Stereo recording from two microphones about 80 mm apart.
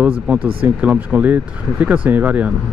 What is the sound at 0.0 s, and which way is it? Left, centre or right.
Speech, centre.